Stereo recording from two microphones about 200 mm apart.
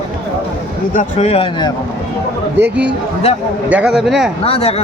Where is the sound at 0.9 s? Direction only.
35° left (ahead or behind).